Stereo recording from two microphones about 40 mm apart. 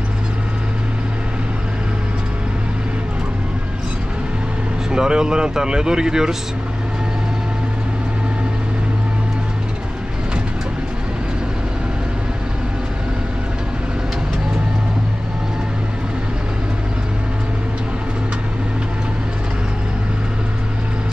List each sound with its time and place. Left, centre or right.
4.9 s speech: centre